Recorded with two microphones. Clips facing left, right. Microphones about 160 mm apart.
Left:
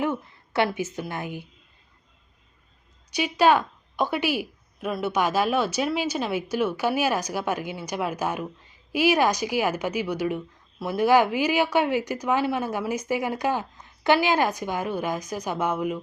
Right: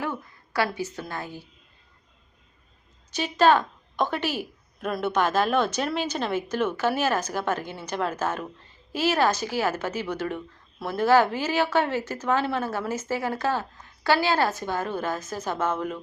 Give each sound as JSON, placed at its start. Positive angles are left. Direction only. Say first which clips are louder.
{"t": 0.0, "sound": "a woman's voice", "louder": "left 5 dB", "side_deg": 20}
{"t": 3.1, "sound": "speech", "louder": "even", "side_deg": 10}